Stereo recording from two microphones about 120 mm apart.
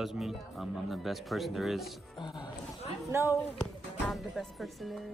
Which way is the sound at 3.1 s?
20° right (ahead or behind).